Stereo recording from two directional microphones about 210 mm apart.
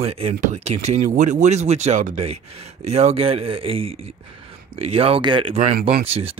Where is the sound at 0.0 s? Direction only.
30° right (ahead or behind).